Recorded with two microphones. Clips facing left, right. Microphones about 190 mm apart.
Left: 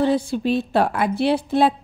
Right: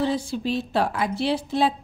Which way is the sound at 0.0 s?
55° left (ahead or behind).